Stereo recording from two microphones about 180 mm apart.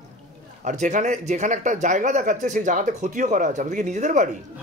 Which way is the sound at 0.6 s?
45° right (ahead or behind).